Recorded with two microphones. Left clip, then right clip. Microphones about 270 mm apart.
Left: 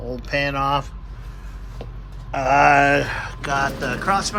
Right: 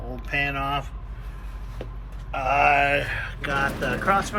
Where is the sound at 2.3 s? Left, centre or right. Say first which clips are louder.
Left 5 dB; left.